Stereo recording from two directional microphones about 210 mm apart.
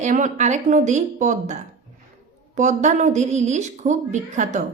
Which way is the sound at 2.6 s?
35° right (ahead or behind).